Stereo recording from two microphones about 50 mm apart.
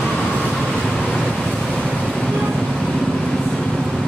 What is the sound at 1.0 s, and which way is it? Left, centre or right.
Vehicle, left.